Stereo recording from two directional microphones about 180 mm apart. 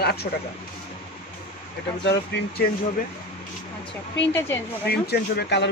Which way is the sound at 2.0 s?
70° left (ahead or behind).